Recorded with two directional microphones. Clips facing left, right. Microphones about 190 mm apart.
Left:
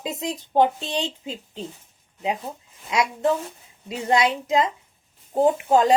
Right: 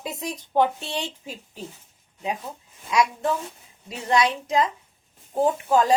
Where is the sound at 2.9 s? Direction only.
25° left (ahead or behind).